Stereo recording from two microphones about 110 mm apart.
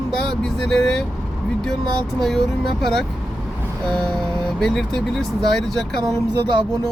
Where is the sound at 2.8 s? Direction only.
5° left (ahead or behind).